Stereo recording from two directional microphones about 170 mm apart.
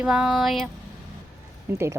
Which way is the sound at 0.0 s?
5° right (ahead or behind).